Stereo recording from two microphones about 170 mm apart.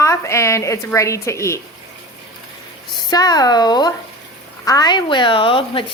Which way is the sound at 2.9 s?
25° left (ahead or behind).